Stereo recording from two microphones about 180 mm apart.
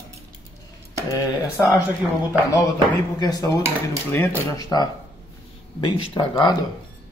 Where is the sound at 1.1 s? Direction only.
20° left (ahead or behind).